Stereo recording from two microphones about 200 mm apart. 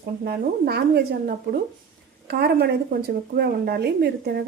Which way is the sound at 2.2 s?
50° right (ahead or behind).